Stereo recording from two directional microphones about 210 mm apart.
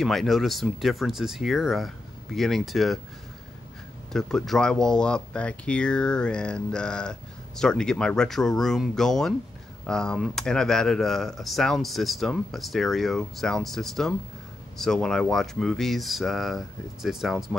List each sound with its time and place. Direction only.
0.0 s speech: centre (ahead or behind)
4.1 s speech: centre (ahead or behind)